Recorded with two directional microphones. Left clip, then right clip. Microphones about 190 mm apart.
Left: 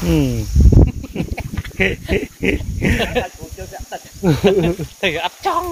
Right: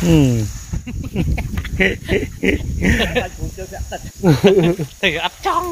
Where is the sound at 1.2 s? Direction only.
40° left (ahead or behind).